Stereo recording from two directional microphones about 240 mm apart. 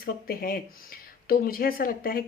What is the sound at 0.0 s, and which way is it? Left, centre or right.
Speech, left.